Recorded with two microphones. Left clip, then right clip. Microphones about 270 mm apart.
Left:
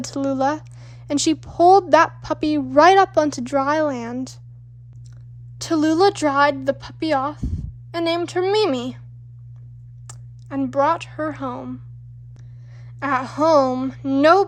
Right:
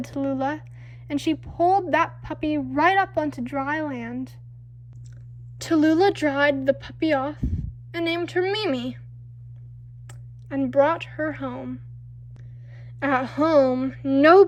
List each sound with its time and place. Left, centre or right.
0.0 s speech: centre
5.5 s speech: centre
10.1 s speech: centre
13.0 s speech: centre